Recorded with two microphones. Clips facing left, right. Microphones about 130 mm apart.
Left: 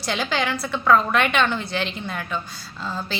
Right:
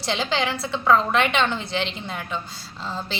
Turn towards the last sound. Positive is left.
turn(degrees=-25)  # may be behind; listen again after turning